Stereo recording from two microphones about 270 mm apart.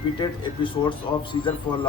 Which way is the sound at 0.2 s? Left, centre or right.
Centre.